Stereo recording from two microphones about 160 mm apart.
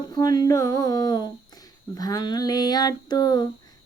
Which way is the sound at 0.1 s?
25° left (ahead or behind).